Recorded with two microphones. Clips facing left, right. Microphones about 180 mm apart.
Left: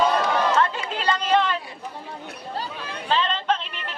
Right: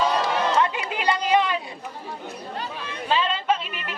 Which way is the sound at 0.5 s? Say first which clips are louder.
Even; 15° right (ahead or behind).